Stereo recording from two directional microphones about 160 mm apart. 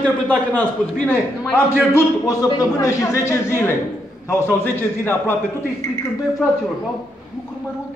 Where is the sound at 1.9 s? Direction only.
20° left (ahead or behind).